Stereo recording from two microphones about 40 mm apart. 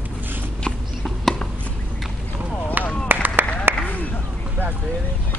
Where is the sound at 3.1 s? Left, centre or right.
Right.